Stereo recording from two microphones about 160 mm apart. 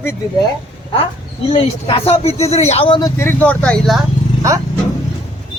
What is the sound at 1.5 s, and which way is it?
Speech, 35° left (ahead or behind).